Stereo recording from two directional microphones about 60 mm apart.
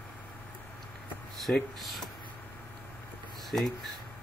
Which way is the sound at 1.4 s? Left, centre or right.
Centre.